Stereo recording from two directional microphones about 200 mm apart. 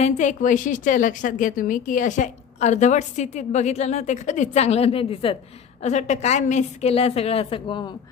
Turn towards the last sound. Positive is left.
turn(degrees=25)  # may be behind; listen again after turning